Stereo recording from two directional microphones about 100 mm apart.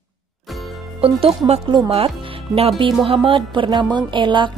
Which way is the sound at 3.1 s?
60° right (ahead or behind).